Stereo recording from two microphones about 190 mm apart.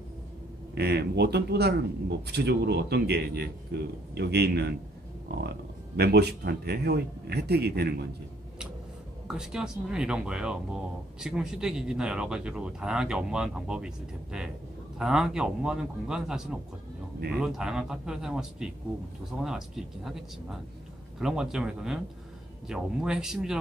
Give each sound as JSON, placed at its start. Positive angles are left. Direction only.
{"t": 0.7, "sound": "a man's voice", "side_deg": -60}
{"t": 5.9, "sound": "a man's voice", "side_deg": -60}
{"t": 9.3, "sound": "speech", "side_deg": -5}